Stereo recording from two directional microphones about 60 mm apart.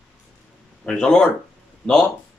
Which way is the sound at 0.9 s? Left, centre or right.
Centre.